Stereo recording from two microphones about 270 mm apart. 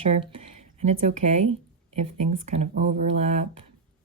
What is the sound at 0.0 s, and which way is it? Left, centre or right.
Speech, centre.